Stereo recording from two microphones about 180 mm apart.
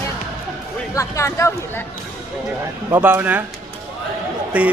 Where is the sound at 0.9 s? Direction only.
15° left (ahead or behind).